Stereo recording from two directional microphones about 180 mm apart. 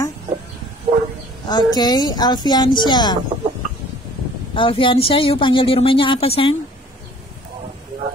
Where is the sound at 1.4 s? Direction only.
20° left (ahead or behind).